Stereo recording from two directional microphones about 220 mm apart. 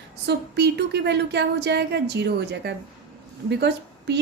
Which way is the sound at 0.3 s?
50° right (ahead or behind).